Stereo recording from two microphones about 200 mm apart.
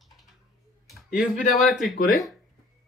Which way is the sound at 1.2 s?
Centre (ahead or behind).